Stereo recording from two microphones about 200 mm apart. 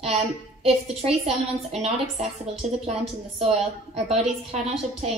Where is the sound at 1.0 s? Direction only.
30° right (ahead or behind).